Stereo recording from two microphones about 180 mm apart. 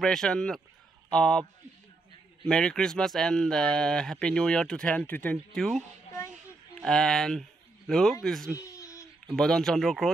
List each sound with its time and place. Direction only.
0.0 s speech: 5° left (ahead or behind)
2.4 s speech: 5° left (ahead or behind)
8.6 s a sound: 15° left (ahead or behind)
9.3 s speech: 5° left (ahead or behind)